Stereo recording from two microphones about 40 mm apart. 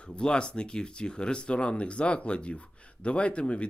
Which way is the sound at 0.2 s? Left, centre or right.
Left.